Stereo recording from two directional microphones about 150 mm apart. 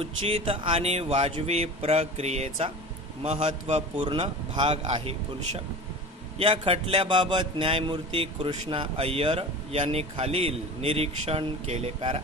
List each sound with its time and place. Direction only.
0.0 s a man's voice: 40° right (ahead or behind)
4.8 s a man's voice: 40° right (ahead or behind)
6.3 s a man's voice: 40° right (ahead or behind)